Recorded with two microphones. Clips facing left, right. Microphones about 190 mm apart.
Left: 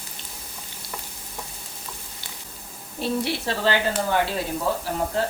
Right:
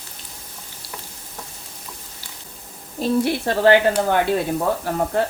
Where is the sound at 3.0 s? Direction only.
50° right (ahead or behind).